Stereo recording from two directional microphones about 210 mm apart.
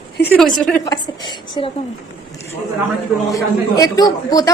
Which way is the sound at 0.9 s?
20° left (ahead or behind).